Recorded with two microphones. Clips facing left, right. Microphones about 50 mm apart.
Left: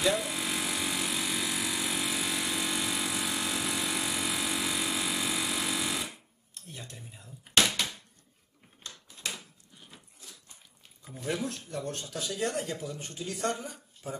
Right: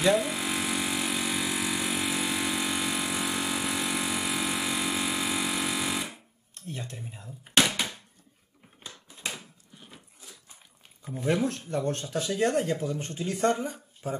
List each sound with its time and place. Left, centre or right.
0.0 s vehicle: centre
6.7 s a sound: right
11.1 s speech: right